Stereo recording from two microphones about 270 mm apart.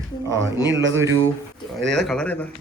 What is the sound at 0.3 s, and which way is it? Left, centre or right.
Speech, right.